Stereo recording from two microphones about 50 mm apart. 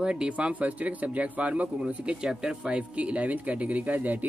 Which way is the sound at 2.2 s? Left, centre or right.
Centre.